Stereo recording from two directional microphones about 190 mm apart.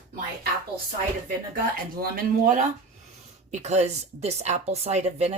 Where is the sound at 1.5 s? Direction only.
50° right (ahead or behind).